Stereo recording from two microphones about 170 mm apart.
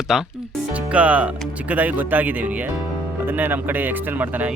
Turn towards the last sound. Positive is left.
turn(degrees=-10)  # may be behind; listen again after turning